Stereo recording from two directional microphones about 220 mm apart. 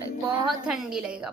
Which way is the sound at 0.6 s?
5° right (ahead or behind).